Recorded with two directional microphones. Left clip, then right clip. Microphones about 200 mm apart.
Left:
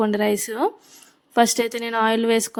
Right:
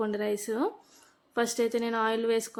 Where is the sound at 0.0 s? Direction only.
45° left (ahead or behind).